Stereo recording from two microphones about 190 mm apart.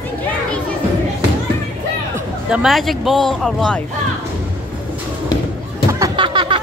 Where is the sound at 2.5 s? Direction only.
Centre (ahead or behind).